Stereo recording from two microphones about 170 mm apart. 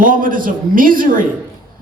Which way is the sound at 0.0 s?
55° right (ahead or behind).